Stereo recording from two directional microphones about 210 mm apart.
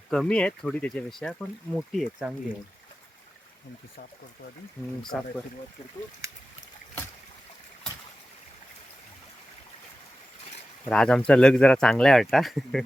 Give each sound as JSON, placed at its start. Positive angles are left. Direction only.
{"t": 0.1, "sound": "speech", "side_deg": 5}
{"t": 5.1, "sound": "speech", "side_deg": 5}
{"t": 6.2, "sound": "speech", "side_deg": -15}
{"t": 10.8, "sound": "speech", "side_deg": 5}